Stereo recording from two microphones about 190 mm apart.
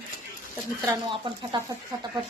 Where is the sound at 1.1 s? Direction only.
25° right (ahead or behind).